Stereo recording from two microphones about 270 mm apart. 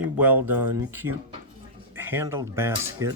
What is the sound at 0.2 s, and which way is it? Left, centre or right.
Speech, centre.